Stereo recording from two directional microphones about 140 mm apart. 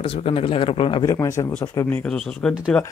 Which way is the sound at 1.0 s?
25° left (ahead or behind).